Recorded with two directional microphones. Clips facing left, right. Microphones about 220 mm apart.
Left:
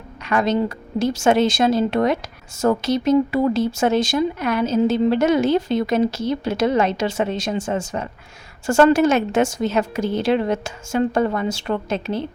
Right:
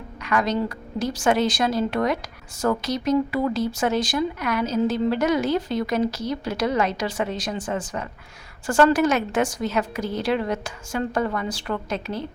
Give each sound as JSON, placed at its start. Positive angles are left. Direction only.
{"t": 0.3, "sound": "speech", "side_deg": 25}